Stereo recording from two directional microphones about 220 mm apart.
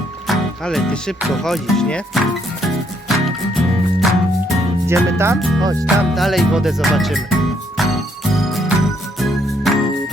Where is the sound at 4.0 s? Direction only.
Centre (ahead or behind).